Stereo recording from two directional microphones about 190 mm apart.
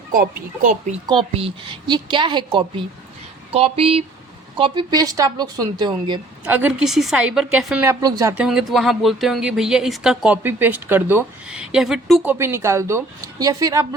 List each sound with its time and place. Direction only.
0.1 s speech: 45° right (ahead or behind)
1.0 s a woman's voice: 25° right (ahead or behind)
6.4 s speech: 10° right (ahead or behind)
7.9 s speech: 20° right (ahead or behind)
8.4 s speech: centre (ahead or behind); by 13.8 s 20° right (ahead or behind)